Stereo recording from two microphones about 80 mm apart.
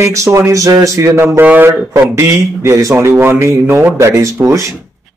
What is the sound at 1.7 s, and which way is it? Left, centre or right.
Speech, right.